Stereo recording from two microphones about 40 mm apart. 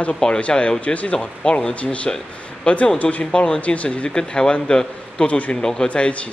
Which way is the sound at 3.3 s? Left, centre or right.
Left.